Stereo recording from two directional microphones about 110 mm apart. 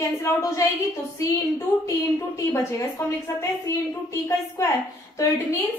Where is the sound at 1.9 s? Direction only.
25° left (ahead or behind).